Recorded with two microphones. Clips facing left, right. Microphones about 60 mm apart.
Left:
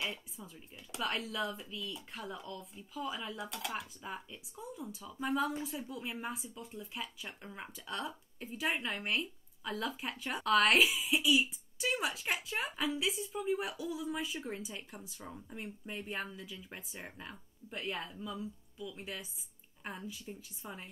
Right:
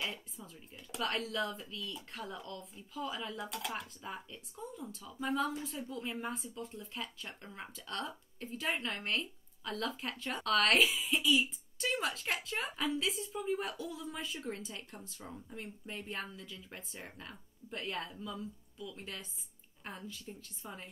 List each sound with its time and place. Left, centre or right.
0.0 s a woman's voice: centre